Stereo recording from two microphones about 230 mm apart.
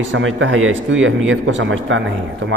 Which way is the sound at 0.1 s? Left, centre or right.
Right.